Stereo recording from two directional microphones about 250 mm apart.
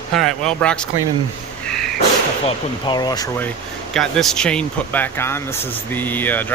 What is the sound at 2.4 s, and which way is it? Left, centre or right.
Speech, centre.